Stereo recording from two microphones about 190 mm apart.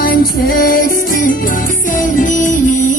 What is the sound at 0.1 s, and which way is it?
Music, 50° left (ahead or behind).